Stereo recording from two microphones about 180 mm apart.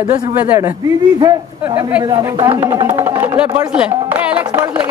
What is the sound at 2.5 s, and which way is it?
Speech, 25° right (ahead or behind).